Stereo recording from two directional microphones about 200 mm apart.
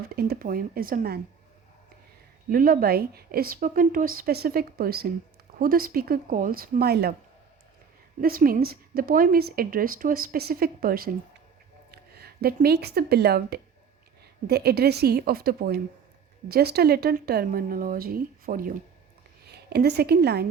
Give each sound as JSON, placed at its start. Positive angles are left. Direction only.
{"t": 0.1, "sound": "a woman's voice", "side_deg": -50}
{"t": 2.5, "sound": "a woman's voice", "side_deg": -45}
{"t": 8.2, "sound": "a woman's voice", "side_deg": -45}